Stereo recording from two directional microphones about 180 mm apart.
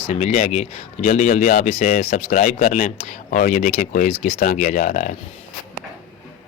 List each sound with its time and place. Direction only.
0.1 s speech: 40° left (ahead or behind)